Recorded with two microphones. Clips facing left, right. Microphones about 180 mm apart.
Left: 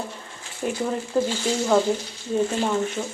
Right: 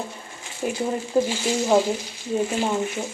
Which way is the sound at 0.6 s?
10° right (ahead or behind).